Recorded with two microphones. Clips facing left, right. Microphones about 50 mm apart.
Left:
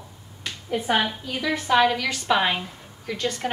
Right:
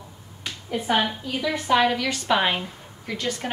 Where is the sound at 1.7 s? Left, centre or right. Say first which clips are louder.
Left 1 dB; centre.